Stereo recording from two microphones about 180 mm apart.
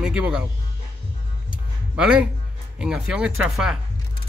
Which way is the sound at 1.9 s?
5° right (ahead or behind).